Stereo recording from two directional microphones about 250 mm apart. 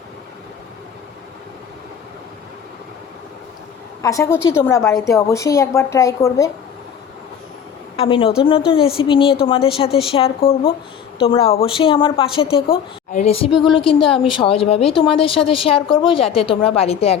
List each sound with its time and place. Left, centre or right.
4.0 s a woman's voice: centre
7.9 s a woman's voice: left